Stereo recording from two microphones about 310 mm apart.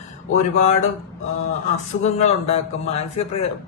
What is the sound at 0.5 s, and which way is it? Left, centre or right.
Speech, left.